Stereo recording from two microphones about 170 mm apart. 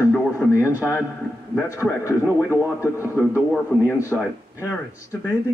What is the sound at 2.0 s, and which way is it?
Speech, 15° left (ahead or behind).